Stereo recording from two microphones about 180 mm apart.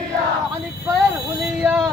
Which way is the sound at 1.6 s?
10° right (ahead or behind).